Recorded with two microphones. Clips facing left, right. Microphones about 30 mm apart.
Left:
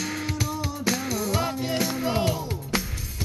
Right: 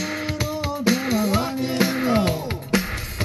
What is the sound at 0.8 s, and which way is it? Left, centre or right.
Music, right.